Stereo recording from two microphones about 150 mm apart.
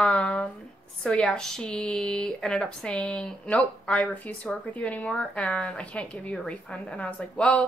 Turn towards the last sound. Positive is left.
turn(degrees=10)  # may be behind; listen again after turning